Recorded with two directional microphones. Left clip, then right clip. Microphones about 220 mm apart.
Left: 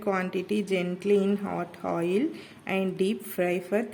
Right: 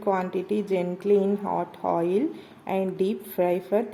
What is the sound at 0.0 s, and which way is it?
A woman's voice, 15° left (ahead or behind).